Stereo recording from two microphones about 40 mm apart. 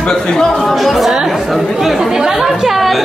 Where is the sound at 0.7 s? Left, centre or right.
Centre.